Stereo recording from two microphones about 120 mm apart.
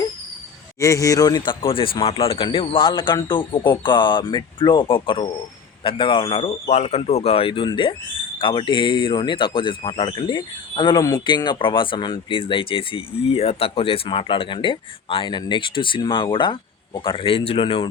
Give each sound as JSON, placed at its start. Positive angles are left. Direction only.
{"t": 0.8, "sound": "speech", "side_deg": 25}
{"t": 1.6, "sound": "speech", "side_deg": 50}
{"t": 6.7, "sound": "speech", "side_deg": 65}